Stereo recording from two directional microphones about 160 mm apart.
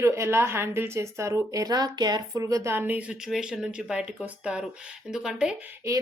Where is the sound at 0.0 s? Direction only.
15° right (ahead or behind).